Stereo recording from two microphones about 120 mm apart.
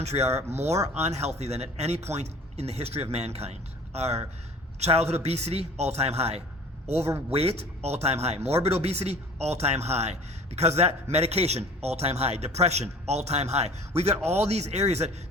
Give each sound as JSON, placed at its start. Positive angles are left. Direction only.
{"t": 0.0, "sound": "a man's voice", "side_deg": -65}